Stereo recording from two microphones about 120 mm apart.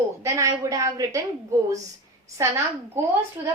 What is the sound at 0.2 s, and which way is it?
A woman's voice, 30° right (ahead or behind).